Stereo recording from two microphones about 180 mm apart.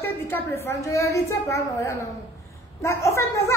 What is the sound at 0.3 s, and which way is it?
A woman's voice, 15° left (ahead or behind).